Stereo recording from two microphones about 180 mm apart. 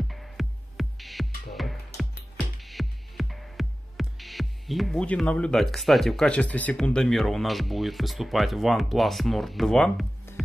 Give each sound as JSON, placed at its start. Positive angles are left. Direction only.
{"t": 0.1, "sound": "music", "side_deg": 0}